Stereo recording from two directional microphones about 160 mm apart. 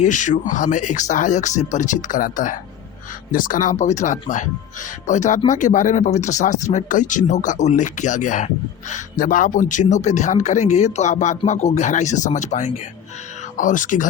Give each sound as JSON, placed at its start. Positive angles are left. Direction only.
{"t": 0.0, "sound": "speech", "side_deg": 50}